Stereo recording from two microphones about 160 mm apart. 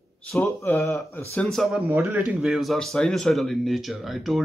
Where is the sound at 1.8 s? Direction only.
15° right (ahead or behind).